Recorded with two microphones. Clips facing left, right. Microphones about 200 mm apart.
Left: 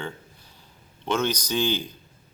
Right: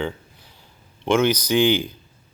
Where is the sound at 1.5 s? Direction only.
75° right (ahead or behind).